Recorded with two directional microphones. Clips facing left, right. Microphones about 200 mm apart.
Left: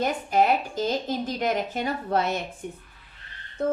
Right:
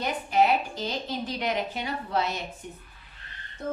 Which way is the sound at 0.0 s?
45° left (ahead or behind).